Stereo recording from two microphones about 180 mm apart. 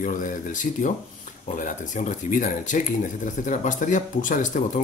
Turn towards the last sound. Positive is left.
turn(degrees=45)  # may be behind; listen again after turning